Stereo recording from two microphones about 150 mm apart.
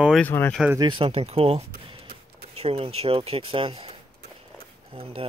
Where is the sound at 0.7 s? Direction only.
30° right (ahead or behind).